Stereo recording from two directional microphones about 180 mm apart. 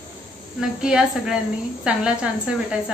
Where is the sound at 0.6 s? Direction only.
5° right (ahead or behind).